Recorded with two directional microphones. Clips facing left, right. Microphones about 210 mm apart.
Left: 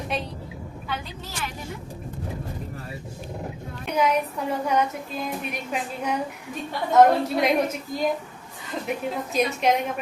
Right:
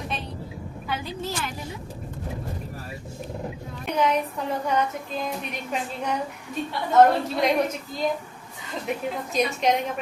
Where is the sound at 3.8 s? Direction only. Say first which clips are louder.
Left 1 dB; 5° left (ahead or behind).